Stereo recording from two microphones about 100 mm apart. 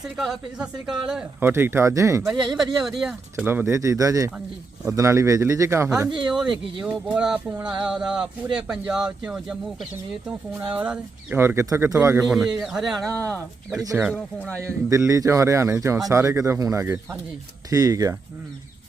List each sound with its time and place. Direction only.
0.0 s a woman's voice: centre (ahead or behind)
1.4 s speech: 20° right (ahead or behind)
2.2 s a woman's voice: 5° right (ahead or behind)
3.3 s speech: 20° right (ahead or behind)
6.2 s a woman's voice: 10° right (ahead or behind)
10.8 s speech: 15° right (ahead or behind)
11.3 s a man's voice: 25° right (ahead or behind)
12.2 s a woman's voice: centre (ahead or behind)
13.1 s speech: 15° left (ahead or behind)
13.9 s speech: 10° right (ahead or behind)
14.6 s a man's voice: 30° right (ahead or behind)
17.7 s a man's voice: 35° right (ahead or behind)